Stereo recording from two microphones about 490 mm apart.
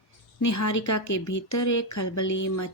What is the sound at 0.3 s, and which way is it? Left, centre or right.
A woman's voice, left.